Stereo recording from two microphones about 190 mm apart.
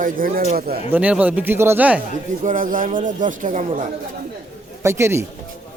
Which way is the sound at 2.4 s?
45° right (ahead or behind).